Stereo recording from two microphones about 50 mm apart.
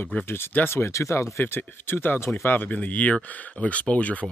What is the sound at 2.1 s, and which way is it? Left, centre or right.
Speech, left.